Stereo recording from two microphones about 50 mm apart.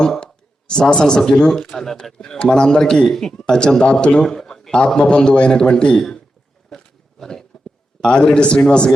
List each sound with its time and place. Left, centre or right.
0.0 s speech: centre
6.7 s a sound: centre
8.0 s speech: centre